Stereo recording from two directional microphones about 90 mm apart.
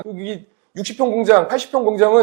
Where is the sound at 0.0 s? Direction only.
15° right (ahead or behind).